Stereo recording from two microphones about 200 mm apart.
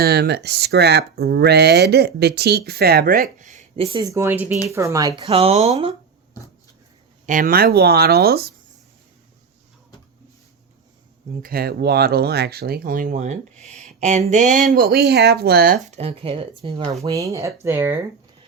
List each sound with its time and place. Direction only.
0.0 s speech: 55° right (ahead or behind); by 5.9 s 30° right (ahead or behind)
7.3 s speech: 40° right (ahead or behind)
11.4 s speech: 50° right (ahead or behind); by 16.9 s 25° right (ahead or behind)
17.0 s speech: 15° right (ahead or behind)